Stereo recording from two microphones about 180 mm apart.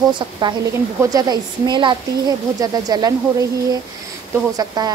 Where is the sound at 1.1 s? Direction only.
25° right (ahead or behind).